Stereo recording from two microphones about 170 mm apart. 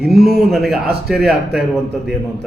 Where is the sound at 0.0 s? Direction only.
Centre (ahead or behind).